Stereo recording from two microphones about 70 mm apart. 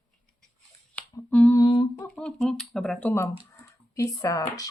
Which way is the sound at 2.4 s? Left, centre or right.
Centre.